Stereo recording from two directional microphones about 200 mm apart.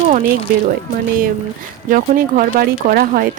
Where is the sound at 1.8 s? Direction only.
40° right (ahead or behind).